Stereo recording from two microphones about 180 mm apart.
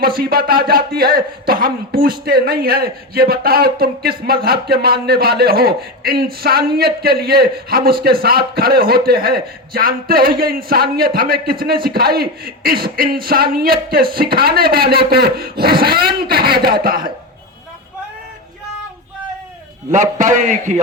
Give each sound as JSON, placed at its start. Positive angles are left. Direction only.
{"t": 0.2, "sound": "a man's voice", "side_deg": -55}
{"t": 19.9, "sound": "a man's voice", "side_deg": -45}